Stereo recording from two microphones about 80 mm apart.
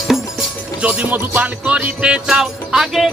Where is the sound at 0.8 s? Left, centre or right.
Centre.